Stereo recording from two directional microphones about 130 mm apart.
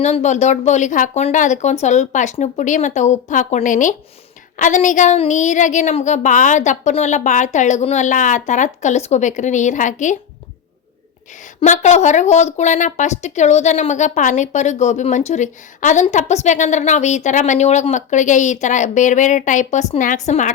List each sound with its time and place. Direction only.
0.0 s a woman's voice: 60° left (ahead or behind)
11.6 s a woman's voice: 65° left (ahead or behind)